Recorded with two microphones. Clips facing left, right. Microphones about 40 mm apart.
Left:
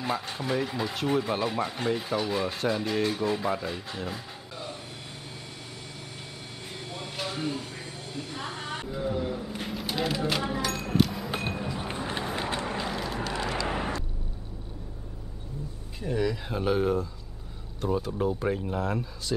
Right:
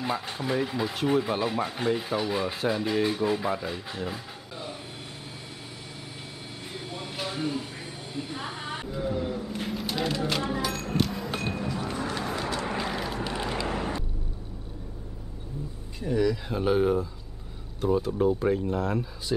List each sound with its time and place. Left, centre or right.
0.0 s speech: centre
6.7 s a sound: centre
11.3 s music: centre
12.4 s vehicle: left
12.6 s vehicle: centre
13.7 s vehicle: centre
16.0 s speech: centre